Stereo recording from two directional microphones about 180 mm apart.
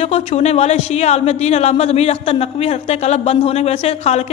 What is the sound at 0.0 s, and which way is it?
A man's voice, 35° left (ahead or behind).